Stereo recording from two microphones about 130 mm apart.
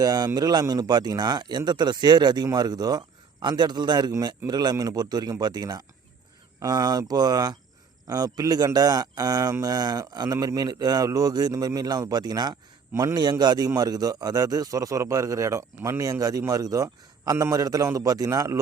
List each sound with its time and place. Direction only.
0.0 s a man's voice: 30° right (ahead or behind)